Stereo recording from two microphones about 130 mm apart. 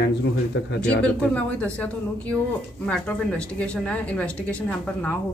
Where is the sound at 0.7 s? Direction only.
10° left (ahead or behind).